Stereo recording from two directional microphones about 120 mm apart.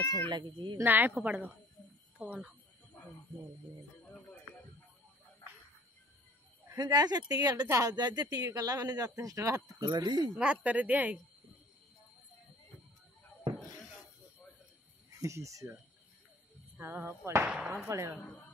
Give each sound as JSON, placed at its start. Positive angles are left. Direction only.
{"t": 0.3, "sound": "speech", "side_deg": -40}
{"t": 0.8, "sound": "speech", "side_deg": -15}
{"t": 6.6, "sound": "speech", "side_deg": -30}
{"t": 10.3, "sound": "speech", "side_deg": -10}
{"t": 15.1, "sound": "speech", "side_deg": -25}
{"t": 16.8, "sound": "speech", "side_deg": -20}
{"t": 17.5, "sound": "speech", "side_deg": -5}
{"t": 17.8, "sound": "speech", "side_deg": -25}